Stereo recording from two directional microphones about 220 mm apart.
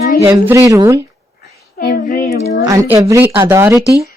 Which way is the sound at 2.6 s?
15° right (ahead or behind).